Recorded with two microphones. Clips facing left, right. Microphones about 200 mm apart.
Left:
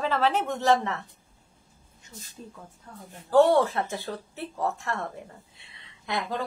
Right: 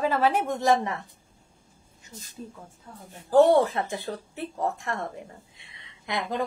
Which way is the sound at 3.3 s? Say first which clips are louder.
Right 1 dB; 15° right (ahead or behind).